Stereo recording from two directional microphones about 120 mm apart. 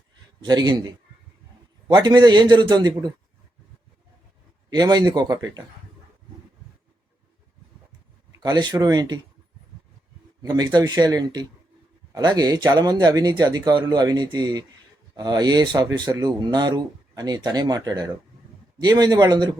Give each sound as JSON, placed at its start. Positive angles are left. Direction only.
{"t": 0.4, "sound": "speech", "side_deg": -35}
{"t": 4.7, "sound": "speech", "side_deg": -35}
{"t": 8.4, "sound": "speech", "side_deg": -40}
{"t": 10.4, "sound": "speech", "side_deg": -35}